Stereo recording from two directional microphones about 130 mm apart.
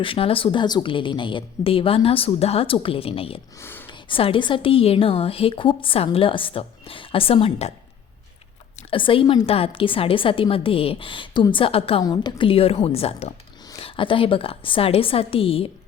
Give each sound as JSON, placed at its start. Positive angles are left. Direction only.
{"t": 0.0, "sound": "a woman's voice", "side_deg": 45}
{"t": 3.6, "sound": "speech", "side_deg": 15}
{"t": 3.8, "sound": "a woman's voice", "side_deg": 40}
{"t": 8.9, "sound": "a woman's voice", "side_deg": 40}
{"t": 13.7, "sound": "a woman's voice", "side_deg": 40}